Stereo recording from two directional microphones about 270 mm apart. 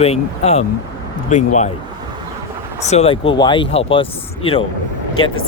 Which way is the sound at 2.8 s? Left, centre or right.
Left.